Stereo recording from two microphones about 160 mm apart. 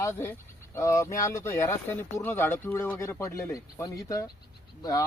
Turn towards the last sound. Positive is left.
turn(degrees=20)  # may be behind; listen again after turning